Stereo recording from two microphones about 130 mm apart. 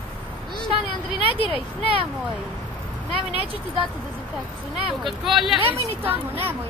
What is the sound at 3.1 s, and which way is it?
Speech, 45° right (ahead or behind).